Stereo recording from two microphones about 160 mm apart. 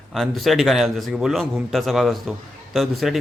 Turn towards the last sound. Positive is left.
turn(degrees=0)  # may be behind; listen again after turning